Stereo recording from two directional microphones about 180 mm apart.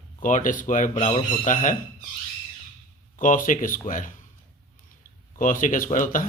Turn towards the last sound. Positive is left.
turn(degrees=50)  # may be behind; listen again after turning